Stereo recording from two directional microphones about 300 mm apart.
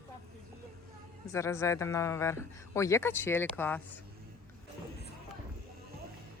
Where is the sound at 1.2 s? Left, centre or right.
Centre.